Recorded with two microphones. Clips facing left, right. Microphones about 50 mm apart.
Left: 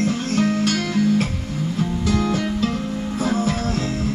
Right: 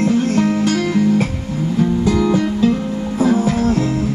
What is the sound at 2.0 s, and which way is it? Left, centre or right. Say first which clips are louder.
Music: right 5 dB; right.